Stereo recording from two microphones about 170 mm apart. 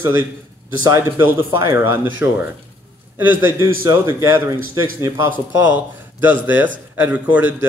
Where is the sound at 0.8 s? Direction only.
15° right (ahead or behind).